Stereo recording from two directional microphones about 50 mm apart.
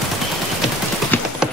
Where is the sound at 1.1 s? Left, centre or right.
Left.